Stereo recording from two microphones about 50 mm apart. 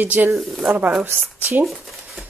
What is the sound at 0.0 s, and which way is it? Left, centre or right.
Speech, right.